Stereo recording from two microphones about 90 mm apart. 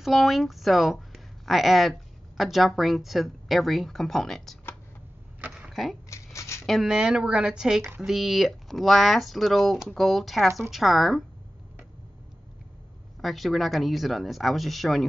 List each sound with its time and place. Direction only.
0.0 s speech: centre (ahead or behind)
5.7 s speech: centre (ahead or behind)
6.0 s shuffling cards: 35° left (ahead or behind)
6.6 s speech: centre (ahead or behind)
13.2 s speech: centre (ahead or behind)